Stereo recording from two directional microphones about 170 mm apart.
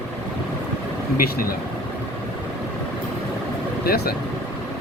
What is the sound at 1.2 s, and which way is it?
Speech, 60° left (ahead or behind).